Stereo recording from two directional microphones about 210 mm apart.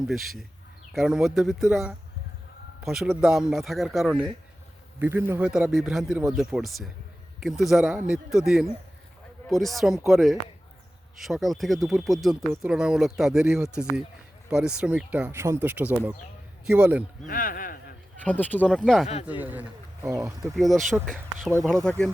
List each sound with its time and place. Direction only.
0.1 s speech: centre (ahead or behind)
17.2 s speech: 40° left (ahead or behind)
18.2 s speech: 5° left (ahead or behind)
19.0 s speech: 30° left (ahead or behind)
19.4 s speech: 10° right (ahead or behind)
20.6 s speech: centre (ahead or behind)